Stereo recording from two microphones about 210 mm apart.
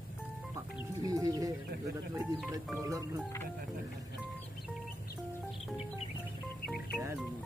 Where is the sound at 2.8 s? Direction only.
15° right (ahead or behind).